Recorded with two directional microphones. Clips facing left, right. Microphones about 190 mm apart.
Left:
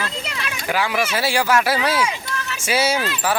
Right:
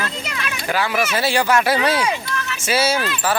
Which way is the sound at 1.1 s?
10° left (ahead or behind).